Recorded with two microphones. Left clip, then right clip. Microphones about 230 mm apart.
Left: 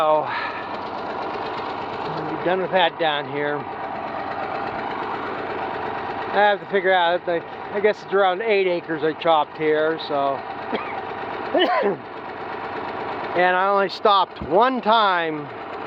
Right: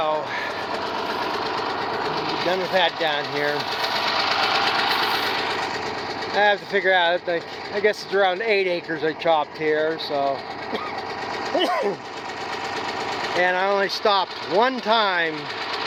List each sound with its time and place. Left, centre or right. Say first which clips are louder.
0.0 s train: left 4 dB; left
1.2 s sewing machine: right 2 dB; right
2.5 s speech: left 2 dB; centre
4.1 s sewing machine: right 6 dB; centre
4.6 s a sound: right 6 dB; left
6.3 s speech: left 1 dB; centre
11.5 s speech: left 3 dB; left
13.3 s speech: left 3 dB; left